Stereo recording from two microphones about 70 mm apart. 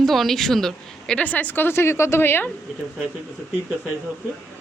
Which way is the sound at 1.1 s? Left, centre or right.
Left.